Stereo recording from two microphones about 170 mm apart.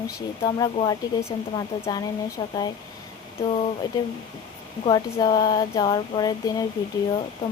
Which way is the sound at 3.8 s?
25° left (ahead or behind).